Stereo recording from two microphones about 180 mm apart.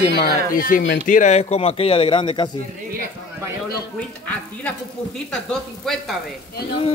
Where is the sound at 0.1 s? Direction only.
55° left (ahead or behind); by 2.5 s 25° left (ahead or behind).